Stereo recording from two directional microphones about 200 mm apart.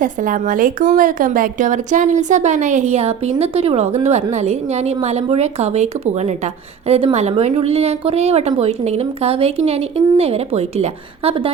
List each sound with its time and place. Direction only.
0.0 s a woman's voice: 40° right (ahead or behind)